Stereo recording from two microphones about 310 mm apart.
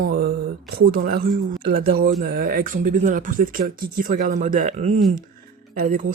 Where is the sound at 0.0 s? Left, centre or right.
Right.